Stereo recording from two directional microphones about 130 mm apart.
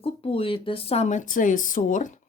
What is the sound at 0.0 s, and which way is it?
Speech, 45° left (ahead or behind).